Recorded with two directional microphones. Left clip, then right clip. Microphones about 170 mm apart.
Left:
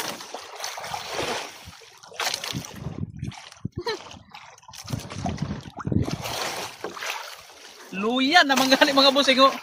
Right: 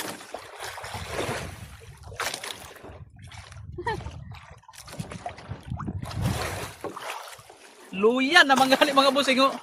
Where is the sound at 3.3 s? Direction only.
15° left (ahead or behind).